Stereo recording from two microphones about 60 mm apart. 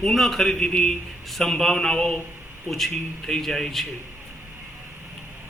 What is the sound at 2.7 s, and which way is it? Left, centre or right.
A man's voice, centre.